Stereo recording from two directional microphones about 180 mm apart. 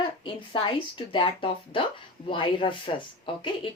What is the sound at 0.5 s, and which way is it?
Speech, 30° left (ahead or behind).